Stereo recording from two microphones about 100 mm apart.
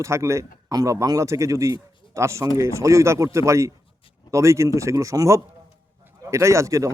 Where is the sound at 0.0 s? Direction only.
30° right (ahead or behind).